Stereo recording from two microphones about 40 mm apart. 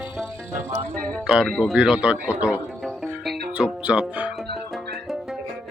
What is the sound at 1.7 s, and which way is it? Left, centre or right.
Speech, centre.